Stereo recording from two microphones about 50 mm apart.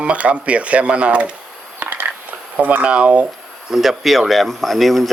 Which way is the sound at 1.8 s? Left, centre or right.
Right.